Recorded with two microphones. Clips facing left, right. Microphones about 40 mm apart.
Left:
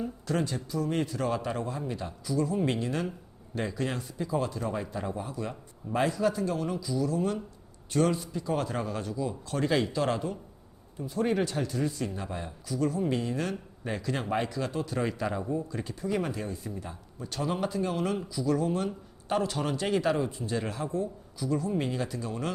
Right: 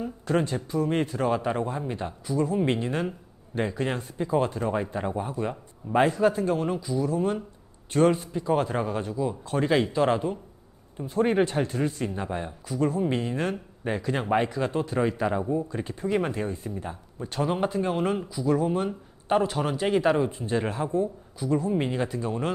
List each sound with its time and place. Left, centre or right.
0.3 s speech: right
10.9 s speech: right; by 15.6 s centre
15.7 s speech: right